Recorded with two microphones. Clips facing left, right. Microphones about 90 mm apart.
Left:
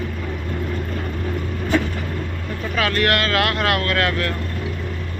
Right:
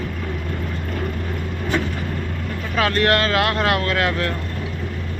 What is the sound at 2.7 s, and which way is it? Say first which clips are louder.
Speech: right 2 dB; 30° right (ahead or behind).